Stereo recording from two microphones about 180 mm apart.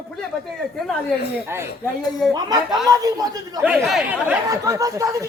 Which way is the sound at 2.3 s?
20° right (ahead or behind).